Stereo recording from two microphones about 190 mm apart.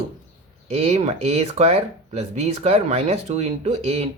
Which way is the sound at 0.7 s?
35° right (ahead or behind).